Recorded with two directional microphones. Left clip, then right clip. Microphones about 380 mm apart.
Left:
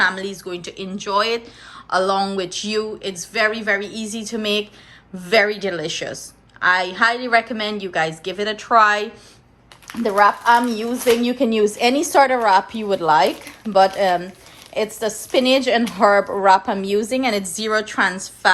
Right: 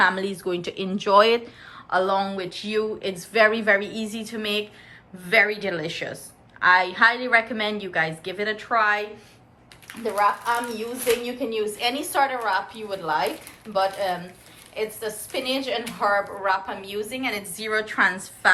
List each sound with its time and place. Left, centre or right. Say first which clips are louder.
0.0 s speech: left 1 dB; centre
9.8 s a woman's voice: left 7 dB; left; by 18.5 s centre